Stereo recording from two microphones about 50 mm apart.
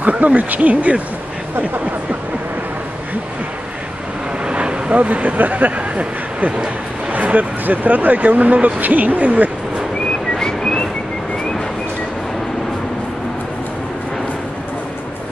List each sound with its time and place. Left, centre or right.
0.0 s speech: right
4.5 s speech: right
10.3 s whistling: centre